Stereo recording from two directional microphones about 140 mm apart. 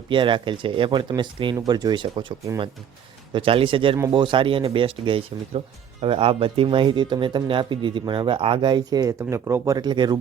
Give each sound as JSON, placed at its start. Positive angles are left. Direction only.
{"t": 0.1, "sound": "speech", "side_deg": -35}
{"t": 3.3, "sound": "speech", "side_deg": -40}